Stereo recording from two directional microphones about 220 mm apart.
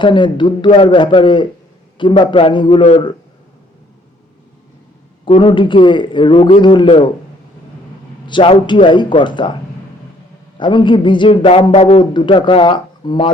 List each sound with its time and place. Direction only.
0.0 s a man's voice: 20° left (ahead or behind)
5.2 s a man's voice: 25° left (ahead or behind)
8.3 s a man's voice: 20° left (ahead or behind)
10.6 s a man's voice: 20° left (ahead or behind)